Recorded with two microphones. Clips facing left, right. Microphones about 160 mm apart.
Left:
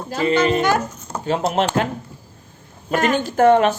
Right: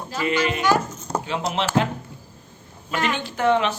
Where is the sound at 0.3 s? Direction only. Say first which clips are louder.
Left 6 dB; 40° left (ahead or behind).